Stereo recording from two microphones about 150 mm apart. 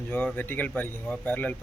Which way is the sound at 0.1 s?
10° left (ahead or behind).